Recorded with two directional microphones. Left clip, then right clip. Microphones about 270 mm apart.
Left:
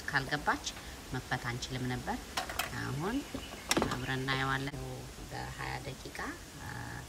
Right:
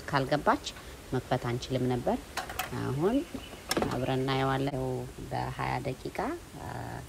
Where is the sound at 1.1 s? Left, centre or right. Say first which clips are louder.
Right 6 dB; right.